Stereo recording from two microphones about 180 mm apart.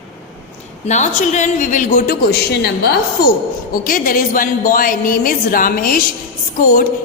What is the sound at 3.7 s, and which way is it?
A woman's voice, 50° left (ahead or behind).